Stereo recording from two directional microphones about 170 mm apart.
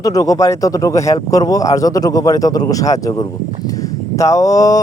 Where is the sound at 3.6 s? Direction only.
20° left (ahead or behind).